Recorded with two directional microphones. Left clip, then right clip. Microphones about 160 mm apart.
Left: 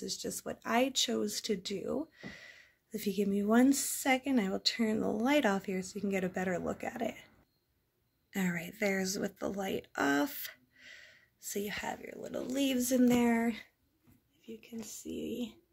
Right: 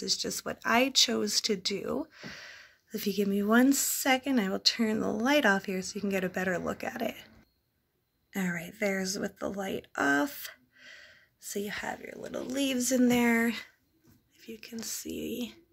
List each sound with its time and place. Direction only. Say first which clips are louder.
0.0 s speech: right 7 dB; centre (ahead or behind)